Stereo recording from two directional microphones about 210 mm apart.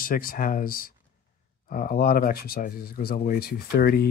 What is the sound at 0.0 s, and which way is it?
Speech, 45° left (ahead or behind).